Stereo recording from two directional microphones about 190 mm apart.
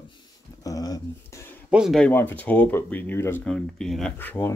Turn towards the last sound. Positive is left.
turn(degrees=10)  # may be behind; listen again after turning